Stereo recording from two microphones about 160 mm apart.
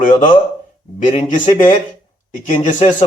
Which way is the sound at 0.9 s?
50° left (ahead or behind).